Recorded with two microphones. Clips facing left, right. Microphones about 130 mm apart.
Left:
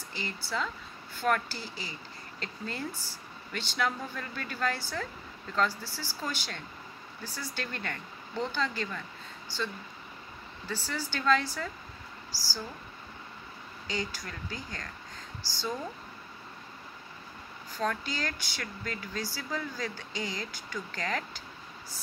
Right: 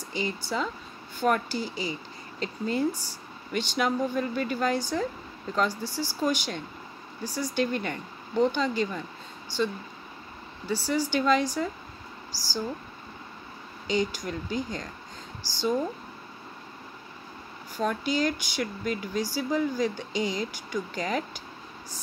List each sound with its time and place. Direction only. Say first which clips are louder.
0.1 s speech: right 6 dB; 15° right (ahead or behind)
10.7 s speech: right 9 dB; 15° right (ahead or behind)
13.8 s speech: right 9 dB; 20° right (ahead or behind)
17.7 s speech: right 6 dB; 15° right (ahead or behind)